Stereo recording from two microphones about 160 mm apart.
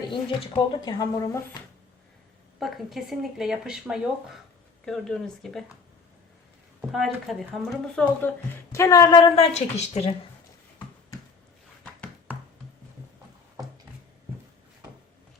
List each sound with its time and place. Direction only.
0.1 s speech: 30° left (ahead or behind)
2.6 s speech: centre (ahead or behind)
6.9 s speech: centre (ahead or behind)
8.2 s a woman's voice: 10° left (ahead or behind); by 10.2 s 40° left (ahead or behind)